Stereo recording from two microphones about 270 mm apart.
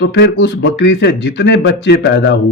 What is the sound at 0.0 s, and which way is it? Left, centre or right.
A man's voice, left.